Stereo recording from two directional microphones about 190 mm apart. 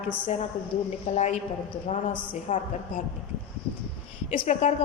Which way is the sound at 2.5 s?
40° left (ahead or behind).